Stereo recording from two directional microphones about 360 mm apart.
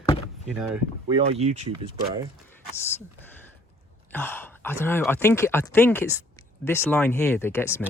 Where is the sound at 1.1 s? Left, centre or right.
Centre.